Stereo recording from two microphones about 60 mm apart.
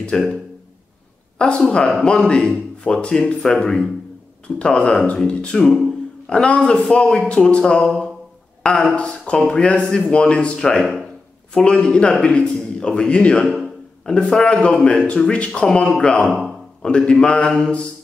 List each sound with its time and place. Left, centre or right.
0.1 s speech: centre
1.4 s a man's voice: centre